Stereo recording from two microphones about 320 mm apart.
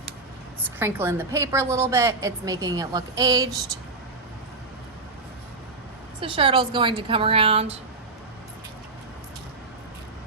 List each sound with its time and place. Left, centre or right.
0.6 s a woman's voice: centre
6.1 s a woman's voice: centre